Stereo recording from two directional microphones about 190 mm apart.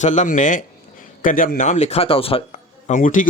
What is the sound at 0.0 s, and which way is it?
Speech, 40° left (ahead or behind).